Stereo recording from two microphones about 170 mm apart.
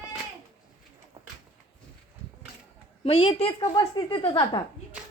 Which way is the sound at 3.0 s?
35° left (ahead or behind).